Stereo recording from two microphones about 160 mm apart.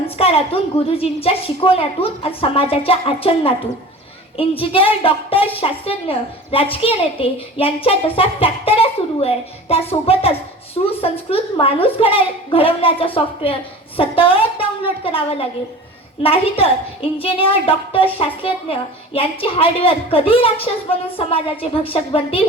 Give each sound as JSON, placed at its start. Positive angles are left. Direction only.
{"t": 0.2, "sound": "a woman's voice", "side_deg": 35}